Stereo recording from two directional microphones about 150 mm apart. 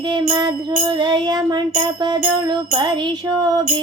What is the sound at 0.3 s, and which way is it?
Music, 30° right (ahead or behind).